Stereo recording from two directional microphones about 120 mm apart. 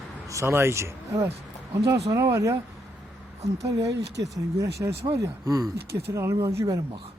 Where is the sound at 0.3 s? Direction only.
25° right (ahead or behind).